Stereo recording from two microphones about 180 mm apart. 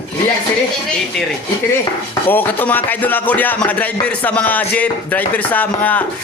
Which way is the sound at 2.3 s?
10° left (ahead or behind).